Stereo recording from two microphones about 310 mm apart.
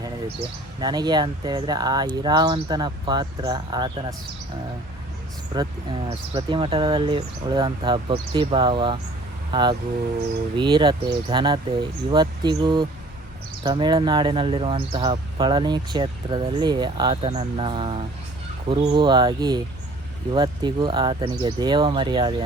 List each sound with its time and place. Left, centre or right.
0.8 s speech: centre
6.1 s speech: centre